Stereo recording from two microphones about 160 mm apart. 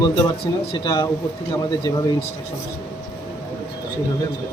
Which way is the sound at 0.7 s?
25° left (ahead or behind).